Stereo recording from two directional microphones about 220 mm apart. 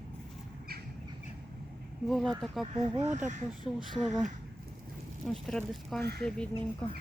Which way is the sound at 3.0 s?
35° right (ahead or behind).